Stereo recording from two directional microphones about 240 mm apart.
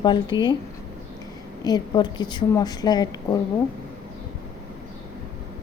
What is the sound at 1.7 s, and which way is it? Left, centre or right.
Speech, centre.